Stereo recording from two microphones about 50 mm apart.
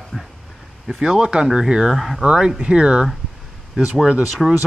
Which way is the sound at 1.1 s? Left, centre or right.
Centre.